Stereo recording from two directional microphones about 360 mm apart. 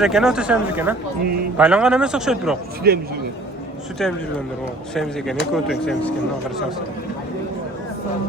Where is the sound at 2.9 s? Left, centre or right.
Right.